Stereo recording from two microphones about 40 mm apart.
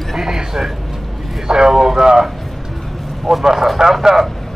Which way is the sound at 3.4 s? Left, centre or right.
Centre.